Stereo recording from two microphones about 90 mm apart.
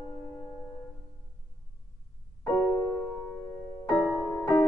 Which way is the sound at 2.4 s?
30° left (ahead or behind).